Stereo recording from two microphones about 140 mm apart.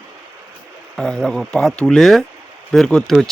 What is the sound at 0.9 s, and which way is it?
Speech, centre (ahead or behind).